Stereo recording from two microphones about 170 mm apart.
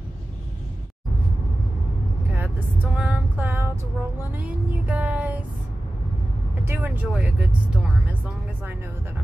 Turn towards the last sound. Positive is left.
turn(degrees=-10)  # may be behind; listen again after turning